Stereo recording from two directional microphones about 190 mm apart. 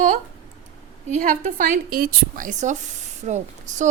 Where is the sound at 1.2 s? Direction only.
40° right (ahead or behind).